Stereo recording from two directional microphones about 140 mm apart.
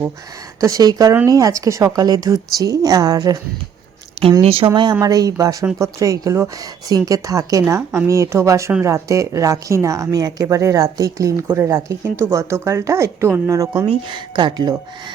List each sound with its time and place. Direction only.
0.6 s a woman's voice: 25° right (ahead or behind)
4.4 s speech: 40° right (ahead or behind)
4.7 s a woman's voice: 30° right (ahead or behind)
13.8 s speech: 35° right (ahead or behind)